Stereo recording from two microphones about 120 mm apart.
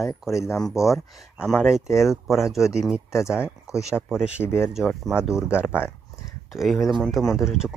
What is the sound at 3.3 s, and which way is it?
Speech, 20° left (ahead or behind).